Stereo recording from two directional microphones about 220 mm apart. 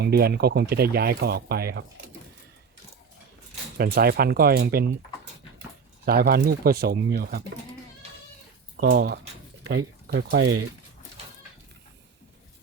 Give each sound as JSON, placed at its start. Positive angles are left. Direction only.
{"t": 0.0, "sound": "speech", "side_deg": -45}
{"t": 3.8, "sound": "speech", "side_deg": -45}
{"t": 6.1, "sound": "speech", "side_deg": -45}
{"t": 8.8, "sound": "speech", "side_deg": -45}
{"t": 10.4, "sound": "speech", "side_deg": -90}